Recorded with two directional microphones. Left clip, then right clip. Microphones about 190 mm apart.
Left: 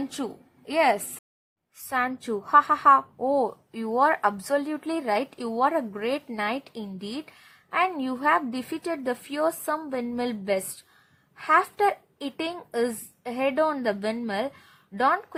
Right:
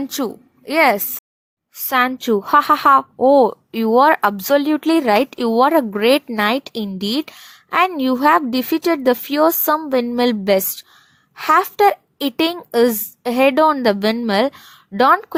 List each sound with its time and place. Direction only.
0.0 s a woman's voice: 30° right (ahead or behind)